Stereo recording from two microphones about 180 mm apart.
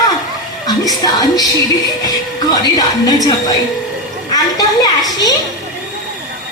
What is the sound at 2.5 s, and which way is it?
Speech, 20° left (ahead or behind).